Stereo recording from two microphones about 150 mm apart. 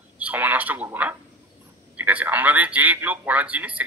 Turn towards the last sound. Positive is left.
turn(degrees=-10)  # may be behind; listen again after turning